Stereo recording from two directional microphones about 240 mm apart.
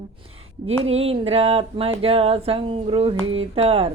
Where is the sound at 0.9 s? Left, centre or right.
Right.